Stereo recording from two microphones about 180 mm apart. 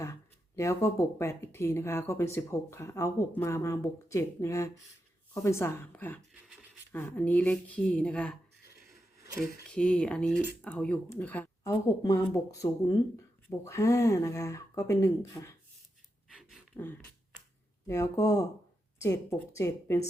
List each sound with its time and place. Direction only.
0.0 s speech: 15° left (ahead or behind)
9.6 s speech: 5° left (ahead or behind)
16.3 s gasp: centre (ahead or behind)
17.8 s speech: 15° left (ahead or behind)